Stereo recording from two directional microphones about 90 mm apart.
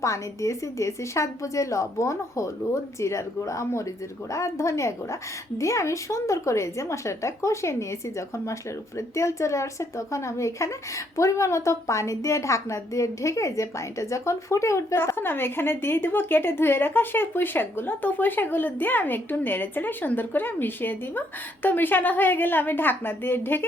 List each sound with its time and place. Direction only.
0.0 s a woman's voice: 35° left (ahead or behind)
9.0 s a woman's voice: 35° left (ahead or behind)